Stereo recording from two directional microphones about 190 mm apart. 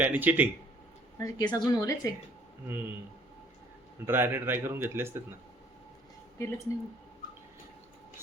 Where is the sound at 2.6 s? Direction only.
10° right (ahead or behind).